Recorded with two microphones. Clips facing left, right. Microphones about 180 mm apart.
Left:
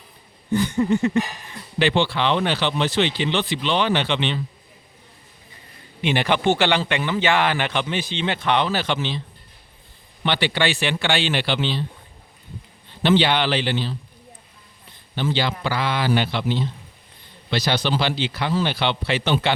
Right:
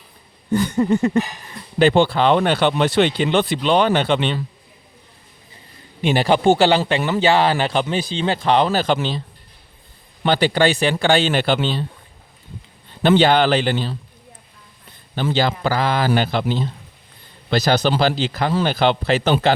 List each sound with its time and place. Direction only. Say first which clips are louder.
0.5 s speech: right 2 dB; 45° right (ahead or behind)
6.0 s speech: right 4 dB; 40° right (ahead or behind)
10.2 s speech: right 5 dB; 45° right (ahead or behind)
13.0 s speech: right 4 dB; 45° right (ahead or behind)
15.1 s speech: right 4 dB; 40° right (ahead or behind)